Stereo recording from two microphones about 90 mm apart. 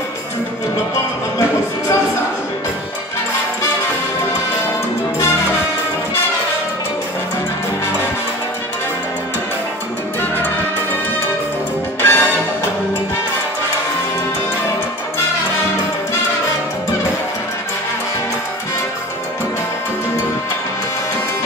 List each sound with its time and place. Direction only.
12.0 s music: 25° left (ahead or behind)